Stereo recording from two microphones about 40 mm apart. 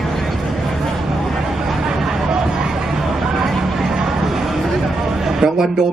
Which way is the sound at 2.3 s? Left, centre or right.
Centre.